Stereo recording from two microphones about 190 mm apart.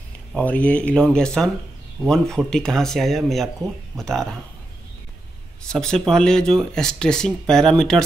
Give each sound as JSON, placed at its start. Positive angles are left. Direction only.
{"t": 0.3, "sound": "speech", "side_deg": 10}
{"t": 5.7, "sound": "speech", "side_deg": 5}